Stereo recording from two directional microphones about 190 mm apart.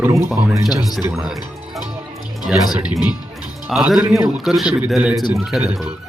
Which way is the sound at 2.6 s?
20° left (ahead or behind).